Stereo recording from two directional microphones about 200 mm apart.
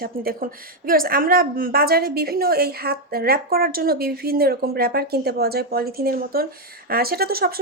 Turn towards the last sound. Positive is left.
turn(degrees=-50)  # may be behind; listen again after turning